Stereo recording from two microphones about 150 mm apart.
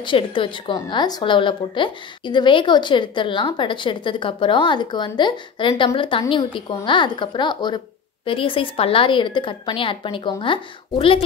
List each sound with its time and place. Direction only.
0.0 s a woman's voice: 35° left (ahead or behind)